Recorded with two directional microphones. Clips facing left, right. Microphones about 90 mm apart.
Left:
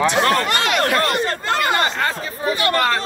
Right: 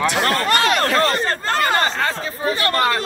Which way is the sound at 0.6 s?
35° right (ahead or behind).